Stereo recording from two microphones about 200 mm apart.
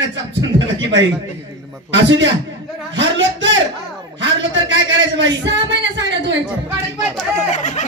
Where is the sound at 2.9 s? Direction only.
65° right (ahead or behind).